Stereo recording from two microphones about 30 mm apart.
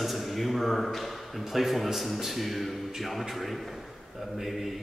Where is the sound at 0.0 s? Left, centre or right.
Centre.